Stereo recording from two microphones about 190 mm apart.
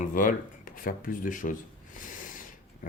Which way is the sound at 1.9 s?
45° left (ahead or behind).